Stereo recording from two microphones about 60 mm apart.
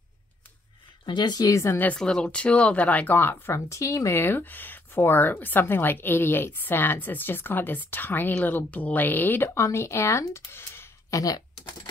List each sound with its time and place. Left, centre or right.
1.4 s speech: left
2.0 s speech: centre
3.2 s speech: left
3.5 s speech: left
4.2 s speech: left
9.5 s speech: left
11.1 s speech: left